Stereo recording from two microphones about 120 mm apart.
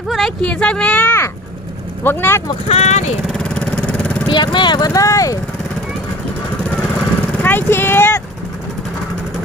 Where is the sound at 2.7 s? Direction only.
70° left (ahead or behind).